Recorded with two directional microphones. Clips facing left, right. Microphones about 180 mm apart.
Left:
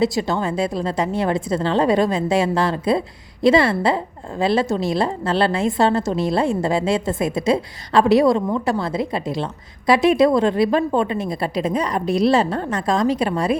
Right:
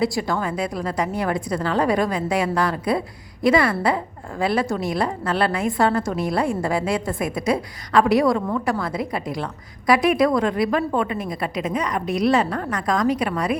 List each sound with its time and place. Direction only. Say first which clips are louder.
0.0 s a woman's voice: left 3 dB; 25° left (ahead or behind)